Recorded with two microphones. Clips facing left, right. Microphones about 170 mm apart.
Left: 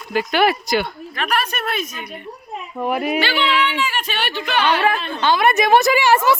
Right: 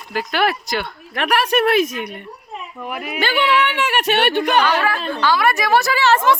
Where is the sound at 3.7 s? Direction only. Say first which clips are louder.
Right 5 dB; 75° right (ahead or behind).